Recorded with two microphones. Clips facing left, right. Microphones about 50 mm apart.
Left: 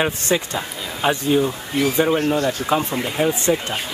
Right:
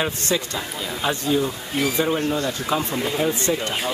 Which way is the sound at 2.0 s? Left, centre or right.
Centre.